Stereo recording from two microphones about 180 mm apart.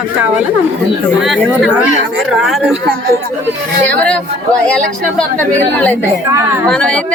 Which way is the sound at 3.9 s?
10° left (ahead or behind).